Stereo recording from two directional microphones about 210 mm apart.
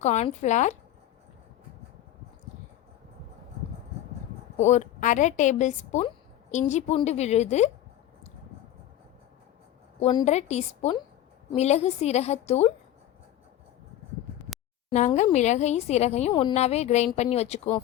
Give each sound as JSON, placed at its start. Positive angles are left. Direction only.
{"t": 0.0, "sound": "speech", "side_deg": 35}
{"t": 4.6, "sound": "speech", "side_deg": 35}
{"t": 10.0, "sound": "a woman's voice", "side_deg": 20}
{"t": 10.2, "sound": "speech", "side_deg": 30}
{"t": 14.8, "sound": "speech", "side_deg": 35}